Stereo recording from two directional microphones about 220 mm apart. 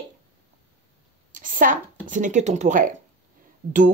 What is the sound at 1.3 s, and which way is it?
A woman's voice, 35° right (ahead or behind).